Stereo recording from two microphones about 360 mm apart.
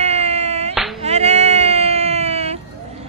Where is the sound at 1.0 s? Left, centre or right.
Centre.